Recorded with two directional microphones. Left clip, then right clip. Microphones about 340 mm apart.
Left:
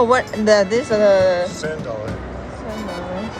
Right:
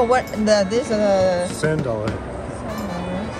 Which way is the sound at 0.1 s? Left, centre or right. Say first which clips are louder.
Left 3 dB; left.